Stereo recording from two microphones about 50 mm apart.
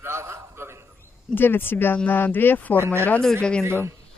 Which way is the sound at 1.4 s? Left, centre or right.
Left.